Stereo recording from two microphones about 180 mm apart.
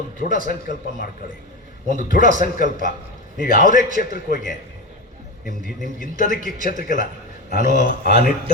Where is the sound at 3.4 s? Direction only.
50° left (ahead or behind).